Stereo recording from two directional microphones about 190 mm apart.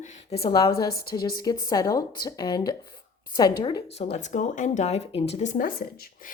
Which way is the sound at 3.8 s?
35° left (ahead or behind).